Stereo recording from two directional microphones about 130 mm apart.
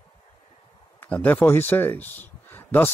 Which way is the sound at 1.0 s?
15° left (ahead or behind).